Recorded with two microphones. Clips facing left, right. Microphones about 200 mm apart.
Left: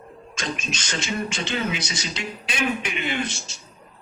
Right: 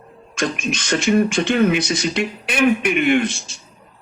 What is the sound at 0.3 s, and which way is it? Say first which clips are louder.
Speech: right 8 dB; 55° right (ahead or behind).